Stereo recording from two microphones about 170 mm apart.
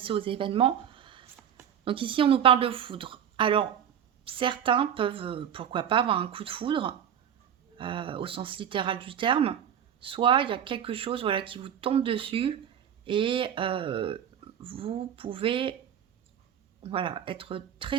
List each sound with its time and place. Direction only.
0.0 s a woman's voice: 30° right (ahead or behind)
16.8 s speech: 30° right (ahead or behind)